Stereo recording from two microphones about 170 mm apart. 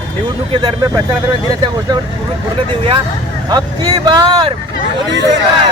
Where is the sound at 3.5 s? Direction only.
25° right (ahead or behind).